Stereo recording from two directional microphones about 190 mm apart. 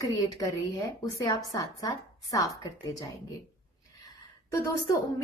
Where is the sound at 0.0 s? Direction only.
20° left (ahead or behind).